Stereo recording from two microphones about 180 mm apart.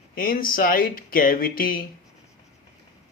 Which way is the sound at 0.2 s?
50° left (ahead or behind).